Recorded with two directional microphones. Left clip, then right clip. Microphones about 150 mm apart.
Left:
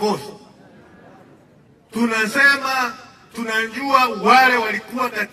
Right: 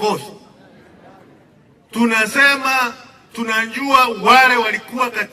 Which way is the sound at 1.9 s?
25° right (ahead or behind).